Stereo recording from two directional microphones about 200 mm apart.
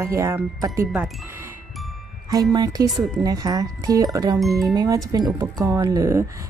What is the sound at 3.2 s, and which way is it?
Speech, 20° right (ahead or behind).